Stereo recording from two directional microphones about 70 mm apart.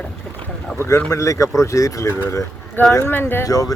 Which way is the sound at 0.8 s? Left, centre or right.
Left.